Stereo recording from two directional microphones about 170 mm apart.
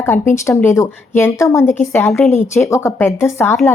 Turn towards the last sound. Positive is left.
turn(degrees=15)  # may be behind; listen again after turning